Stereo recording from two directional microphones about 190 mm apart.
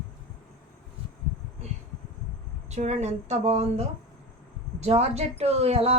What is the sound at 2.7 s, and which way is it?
A woman's voice, 35° right (ahead or behind).